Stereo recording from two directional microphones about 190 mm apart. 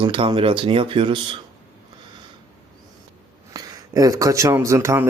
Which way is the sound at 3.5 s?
20° right (ahead or behind).